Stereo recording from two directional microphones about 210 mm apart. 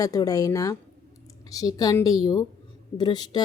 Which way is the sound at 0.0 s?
15° left (ahead or behind).